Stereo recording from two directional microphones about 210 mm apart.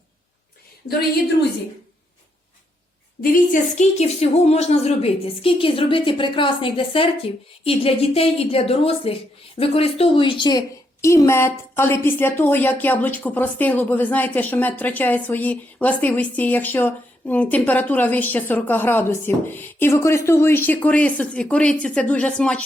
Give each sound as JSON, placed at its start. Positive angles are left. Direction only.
{"t": 3.2, "sound": "a woman's voice", "side_deg": 40}